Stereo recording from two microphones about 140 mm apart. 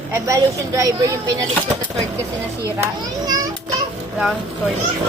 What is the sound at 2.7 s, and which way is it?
Speech, 25° right (ahead or behind).